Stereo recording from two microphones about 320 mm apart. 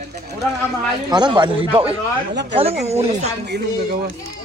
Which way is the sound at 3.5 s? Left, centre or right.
Right.